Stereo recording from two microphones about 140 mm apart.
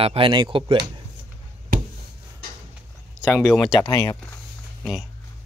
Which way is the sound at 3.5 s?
Centre (ahead or behind).